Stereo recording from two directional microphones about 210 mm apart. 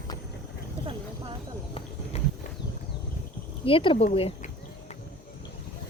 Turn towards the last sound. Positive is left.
turn(degrees=25)  # may be behind; listen again after turning